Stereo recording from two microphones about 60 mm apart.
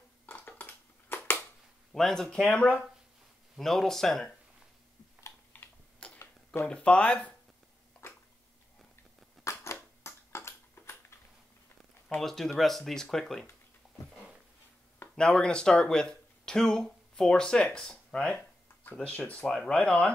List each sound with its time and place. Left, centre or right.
0.3 s crushing: left
1.9 s speech: centre
3.5 s speech: centre
5.5 s typing: left
6.0 s a sound: centre
6.7 s speech: centre
9.4 s a sound: left
12.2 s speech: centre
15.1 s speech: centre
19.4 s speech: centre